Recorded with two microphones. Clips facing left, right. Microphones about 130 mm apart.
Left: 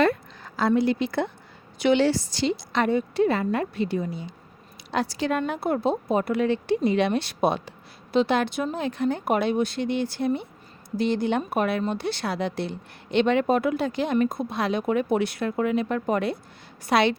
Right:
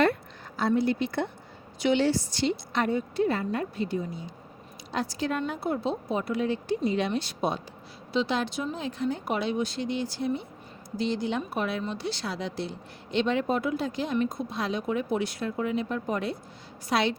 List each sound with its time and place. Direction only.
0.4 s a woman's voice: 90° left
1.8 s a woman's voice: 70° left (ahead or behind)